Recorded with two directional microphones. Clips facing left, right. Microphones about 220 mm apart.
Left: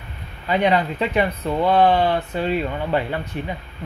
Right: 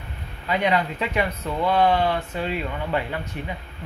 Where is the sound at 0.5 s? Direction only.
35° left (ahead or behind).